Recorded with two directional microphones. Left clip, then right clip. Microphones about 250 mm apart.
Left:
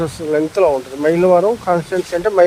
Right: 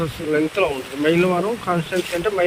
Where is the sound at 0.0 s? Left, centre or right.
Left.